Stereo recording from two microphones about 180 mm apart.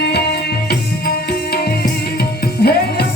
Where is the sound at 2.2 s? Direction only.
60° left (ahead or behind).